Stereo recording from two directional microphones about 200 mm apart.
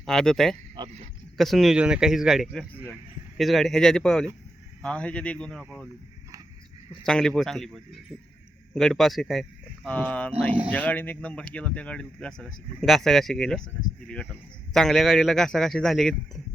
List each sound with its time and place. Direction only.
0.0 s speech: centre (ahead or behind)
0.8 s speech: 20° right (ahead or behind)
1.4 s speech: centre (ahead or behind)
7.0 s speech: 5° left (ahead or behind)